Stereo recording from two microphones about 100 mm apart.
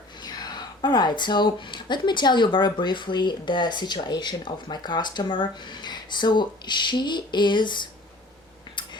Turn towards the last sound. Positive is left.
turn(degrees=50)  # may be behind; listen again after turning